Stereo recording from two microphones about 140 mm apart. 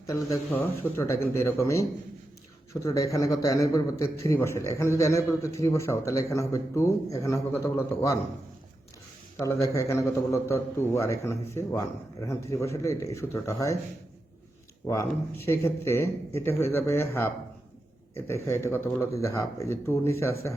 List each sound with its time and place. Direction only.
0.5 s a man's voice: 15° left (ahead or behind)
9.4 s a man's voice: 20° left (ahead or behind)
14.8 s a man's voice: 20° left (ahead or behind)